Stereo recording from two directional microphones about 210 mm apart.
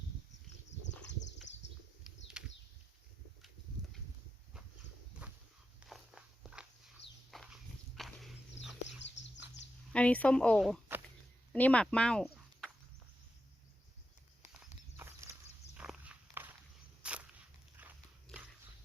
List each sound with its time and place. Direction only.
2.0 s a sound: 5° right (ahead or behind)
5.2 s walk: 10° right (ahead or behind)
9.0 s bird: 60° left (ahead or behind)
9.9 s speech: 5° left (ahead or behind)
14.9 s walk: 10° right (ahead or behind)
17.0 s a sound: 5° right (ahead or behind)
17.8 s dog: 10° right (ahead or behind)